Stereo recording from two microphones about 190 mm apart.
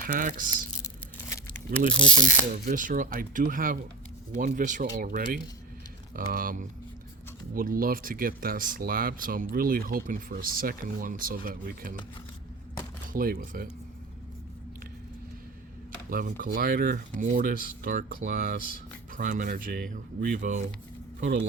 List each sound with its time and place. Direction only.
0.0 s speech: 45° right (ahead or behind)
2.2 s speech: 45° right (ahead or behind)
13.1 s speech: 50° right (ahead or behind)
16.0 s speech: 45° right (ahead or behind)